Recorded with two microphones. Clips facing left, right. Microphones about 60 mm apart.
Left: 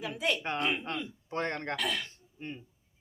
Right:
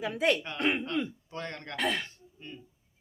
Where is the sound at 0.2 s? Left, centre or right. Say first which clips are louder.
Right 5 dB; right.